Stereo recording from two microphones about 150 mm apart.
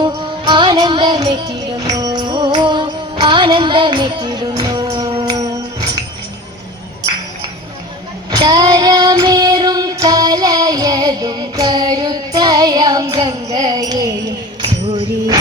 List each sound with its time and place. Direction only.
0.0 s music: 30° right (ahead or behind)
8.4 s female singing: 25° right (ahead or behind)
13.1 s music: 30° right (ahead or behind)